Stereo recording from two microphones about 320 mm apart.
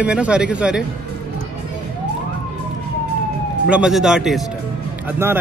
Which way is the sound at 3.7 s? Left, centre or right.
Centre.